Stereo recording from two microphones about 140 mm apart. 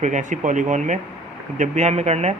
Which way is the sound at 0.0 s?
60° right (ahead or behind).